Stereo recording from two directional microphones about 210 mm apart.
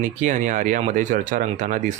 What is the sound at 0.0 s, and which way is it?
Speech, 35° right (ahead or behind).